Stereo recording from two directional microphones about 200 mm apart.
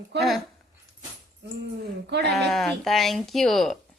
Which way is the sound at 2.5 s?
Centre (ahead or behind).